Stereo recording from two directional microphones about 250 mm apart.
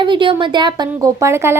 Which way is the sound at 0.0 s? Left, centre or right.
Centre.